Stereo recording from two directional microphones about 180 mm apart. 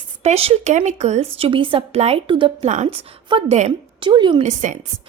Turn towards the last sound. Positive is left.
turn(degrees=-45)  # may be behind; listen again after turning